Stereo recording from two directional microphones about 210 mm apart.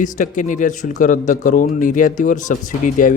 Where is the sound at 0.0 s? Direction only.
35° left (ahead or behind).